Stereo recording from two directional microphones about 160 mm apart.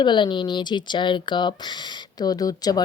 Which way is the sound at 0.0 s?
30° left (ahead or behind).